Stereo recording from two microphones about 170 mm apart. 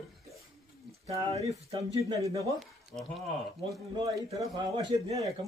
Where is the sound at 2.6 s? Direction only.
Centre (ahead or behind).